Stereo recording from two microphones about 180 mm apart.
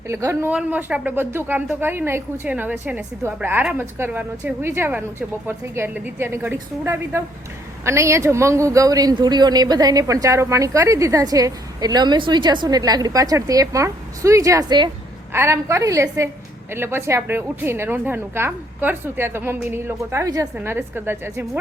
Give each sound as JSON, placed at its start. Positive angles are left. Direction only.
{"t": 0.1, "sound": "speech", "side_deg": -15}